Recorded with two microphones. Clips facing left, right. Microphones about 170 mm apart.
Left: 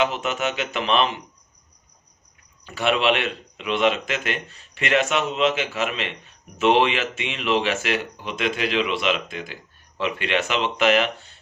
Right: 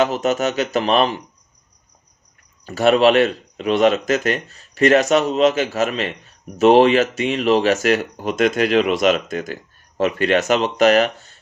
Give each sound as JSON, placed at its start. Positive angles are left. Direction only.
{"t": 0.0, "sound": "speech", "side_deg": -40}
{"t": 2.6, "sound": "speech", "side_deg": -40}